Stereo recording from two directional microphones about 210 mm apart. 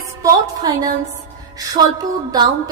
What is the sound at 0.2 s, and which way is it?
A woman's voice, 20° right (ahead or behind).